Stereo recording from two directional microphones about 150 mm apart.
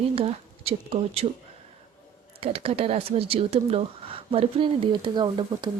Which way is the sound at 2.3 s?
40° right (ahead or behind).